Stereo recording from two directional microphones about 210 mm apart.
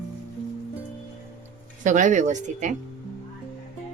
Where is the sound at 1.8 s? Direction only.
35° right (ahead or behind).